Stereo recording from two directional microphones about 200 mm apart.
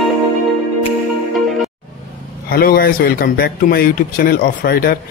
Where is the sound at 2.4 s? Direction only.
45° left (ahead or behind).